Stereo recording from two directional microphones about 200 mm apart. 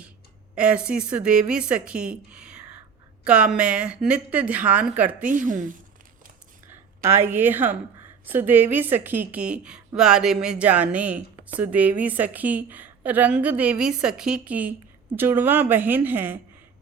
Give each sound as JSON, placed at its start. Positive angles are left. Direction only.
{"t": 0.5, "sound": "a woman's voice", "side_deg": -5}
{"t": 5.2, "sound": "a woman's voice", "side_deg": -40}
{"t": 6.7, "sound": "a woman's voice", "side_deg": -10}